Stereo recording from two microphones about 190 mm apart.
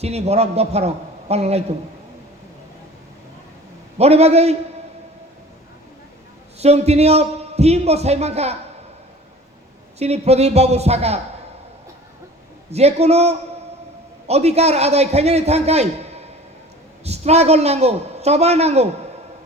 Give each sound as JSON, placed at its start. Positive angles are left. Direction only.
{"t": 0.0, "sound": "a man's voice", "side_deg": -35}
{"t": 3.9, "sound": "a man's voice", "side_deg": -35}
{"t": 6.6, "sound": "a man's voice", "side_deg": -35}
{"t": 10.0, "sound": "a man's voice", "side_deg": -35}
{"t": 12.7, "sound": "a man's voice", "side_deg": -35}